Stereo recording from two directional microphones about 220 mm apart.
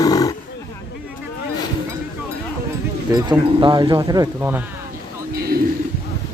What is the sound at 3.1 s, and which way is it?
Speech, 20° right (ahead or behind).